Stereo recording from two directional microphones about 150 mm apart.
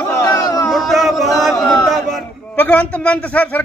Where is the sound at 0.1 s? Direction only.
20° left (ahead or behind).